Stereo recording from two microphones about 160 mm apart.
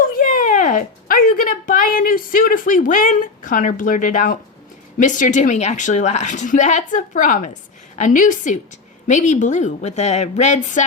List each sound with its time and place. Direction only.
0.0 s a woman's voice: 55° left (ahead or behind)